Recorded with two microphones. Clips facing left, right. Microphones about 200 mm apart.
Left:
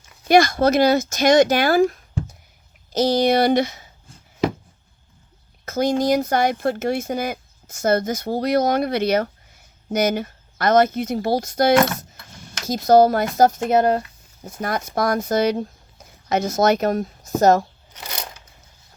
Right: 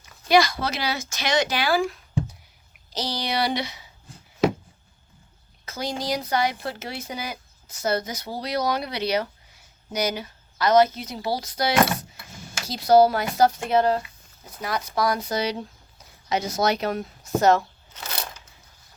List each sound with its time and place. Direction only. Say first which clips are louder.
0.3 s speech: left 5 dB; 50° left (ahead or behind)
5.6 s speech: left 10 dB; 50° left (ahead or behind)
17.9 s a sound: left 1 dB; 15° left (ahead or behind)